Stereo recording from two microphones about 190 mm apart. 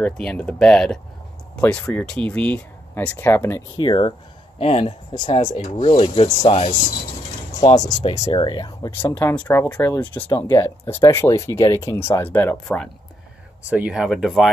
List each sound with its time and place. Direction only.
0.0 s speech: 5° left (ahead or behind)
3.7 s speech: 25° left (ahead or behind)
5.5 s speech: 35° left (ahead or behind)
7.7 s speech: 20° left (ahead or behind)
8.1 s speech: 30° left (ahead or behind)
9.0 s speech: 10° left (ahead or behind)
13.7 s speech: 5° right (ahead or behind)